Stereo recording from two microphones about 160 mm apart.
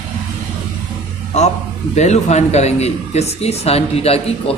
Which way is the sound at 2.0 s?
45° left (ahead or behind).